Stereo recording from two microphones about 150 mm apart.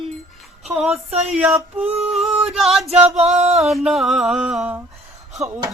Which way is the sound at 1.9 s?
40° right (ahead or behind).